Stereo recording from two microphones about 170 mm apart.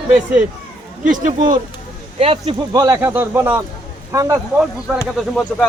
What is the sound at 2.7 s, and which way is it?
Speech, 20° right (ahead or behind).